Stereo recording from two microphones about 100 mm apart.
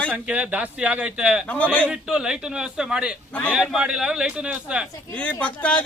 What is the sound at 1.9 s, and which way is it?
A man's voice, 10° right (ahead or behind).